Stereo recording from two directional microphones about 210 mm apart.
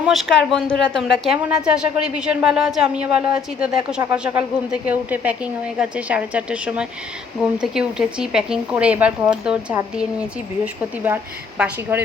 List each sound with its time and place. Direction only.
0.0 s a woman's voice: centre (ahead or behind)
11.0 s a woman's voice: 5° right (ahead or behind)